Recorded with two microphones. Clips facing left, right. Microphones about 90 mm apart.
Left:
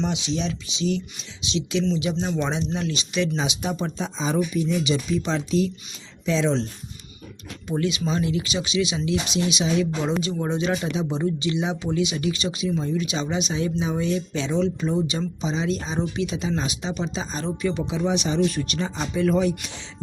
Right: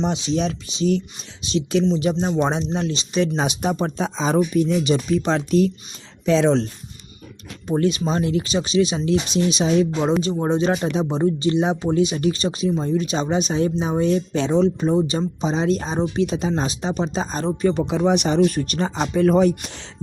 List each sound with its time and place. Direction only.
0.0 s speech: 40° right (ahead or behind)
2.7 s speech: 35° right (ahead or behind); by 6.7 s 55° right (ahead or behind)
7.7 s speech: 40° right (ahead or behind)
17.8 s speech: 55° right (ahead or behind)
18.4 s speech: 40° right (ahead or behind)